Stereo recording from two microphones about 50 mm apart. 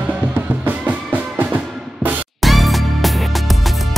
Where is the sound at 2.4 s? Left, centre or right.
Centre.